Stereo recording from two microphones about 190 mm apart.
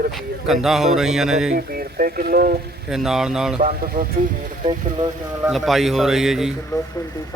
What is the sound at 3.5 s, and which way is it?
Speech, 50° right (ahead or behind).